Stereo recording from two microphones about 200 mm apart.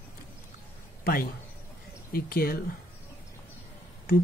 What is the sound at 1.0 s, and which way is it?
Speech, 45° left (ahead or behind).